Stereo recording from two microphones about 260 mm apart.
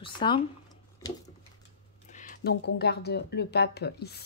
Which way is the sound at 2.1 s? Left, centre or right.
Left.